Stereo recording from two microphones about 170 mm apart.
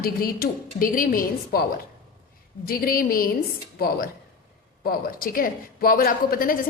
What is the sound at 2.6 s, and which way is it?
Speech, 60° left (ahead or behind).